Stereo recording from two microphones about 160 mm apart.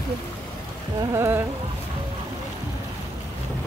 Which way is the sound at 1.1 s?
15° right (ahead or behind).